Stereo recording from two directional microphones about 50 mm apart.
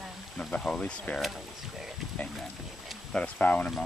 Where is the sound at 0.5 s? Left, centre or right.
Centre.